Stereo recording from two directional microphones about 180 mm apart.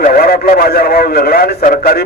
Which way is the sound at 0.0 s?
55° left (ahead or behind).